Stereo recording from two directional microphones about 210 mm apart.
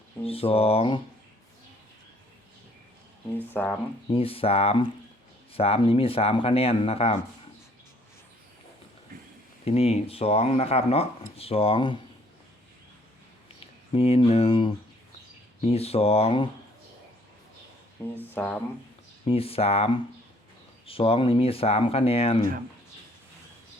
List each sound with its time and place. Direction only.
0.3 s speech: 25° left (ahead or behind)
3.5 s speech: 10° left (ahead or behind)
4.1 s speech: 25° left (ahead or behind)
9.6 s speech: 30° left (ahead or behind)
13.9 s speech: 25° left (ahead or behind)
18.0 s speech: 10° left (ahead or behind)
19.3 s speech: 25° left (ahead or behind)